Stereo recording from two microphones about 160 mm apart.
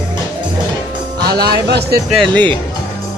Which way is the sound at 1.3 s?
80° right.